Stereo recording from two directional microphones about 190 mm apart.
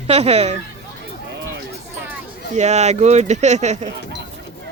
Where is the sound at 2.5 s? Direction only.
35° right (ahead or behind).